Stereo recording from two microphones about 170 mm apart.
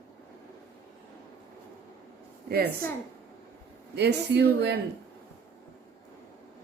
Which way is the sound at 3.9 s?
80° right.